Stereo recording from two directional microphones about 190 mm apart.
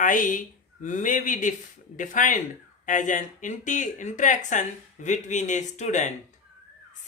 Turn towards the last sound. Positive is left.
turn(degrees=40)  # may be behind; listen again after turning